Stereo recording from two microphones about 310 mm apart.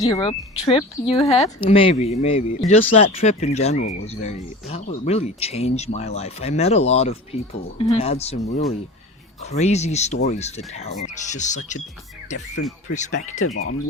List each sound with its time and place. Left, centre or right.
0.0 s speech: centre
13.4 s speech: left